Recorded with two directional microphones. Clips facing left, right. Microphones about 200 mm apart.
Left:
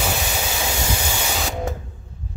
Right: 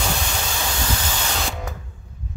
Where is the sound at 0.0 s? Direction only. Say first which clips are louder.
Left 2 dB; 10° left (ahead or behind).